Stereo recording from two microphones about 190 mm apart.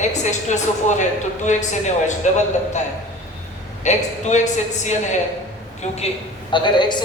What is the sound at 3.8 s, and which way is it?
Speech, 40° left (ahead or behind).